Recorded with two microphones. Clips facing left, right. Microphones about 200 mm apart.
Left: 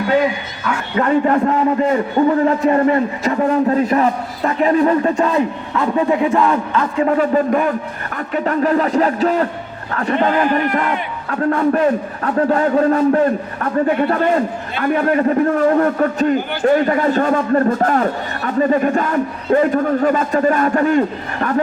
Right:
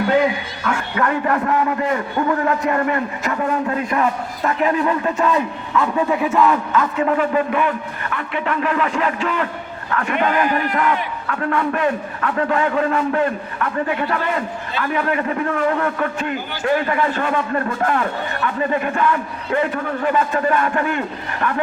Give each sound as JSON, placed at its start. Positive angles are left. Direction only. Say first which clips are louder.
{"t": 0.9, "sound": "a man's voice", "louder": "left 7 dB", "side_deg": 25}